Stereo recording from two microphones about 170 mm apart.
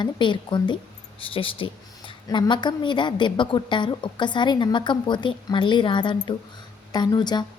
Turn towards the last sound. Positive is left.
turn(degrees=25)  # may be behind; listen again after turning